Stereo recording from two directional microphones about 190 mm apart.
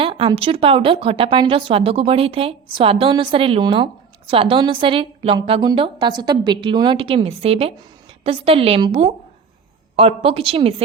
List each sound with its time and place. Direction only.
0.0 s a woman's voice: 25° right (ahead or behind)